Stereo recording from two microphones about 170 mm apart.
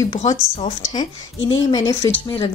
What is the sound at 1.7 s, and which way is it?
Speech, 20° left (ahead or behind).